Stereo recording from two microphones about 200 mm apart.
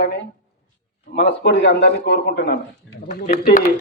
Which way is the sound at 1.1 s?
60° left (ahead or behind).